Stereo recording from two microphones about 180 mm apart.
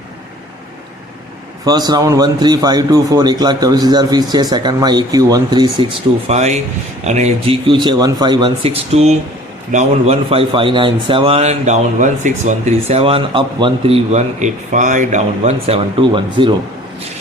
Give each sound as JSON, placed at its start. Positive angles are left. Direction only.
{"t": 1.6, "sound": "a man's voice", "side_deg": -20}